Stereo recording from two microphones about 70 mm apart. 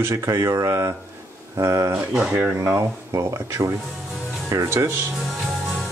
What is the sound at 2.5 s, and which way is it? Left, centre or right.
Speech, right.